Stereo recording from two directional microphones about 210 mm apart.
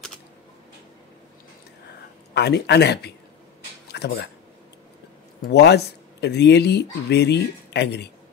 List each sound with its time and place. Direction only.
2.3 s speech: 55° left (ahead or behind)
5.5 s speech: 50° left (ahead or behind)